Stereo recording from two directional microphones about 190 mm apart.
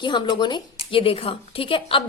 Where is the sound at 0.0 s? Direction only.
25° left (ahead or behind).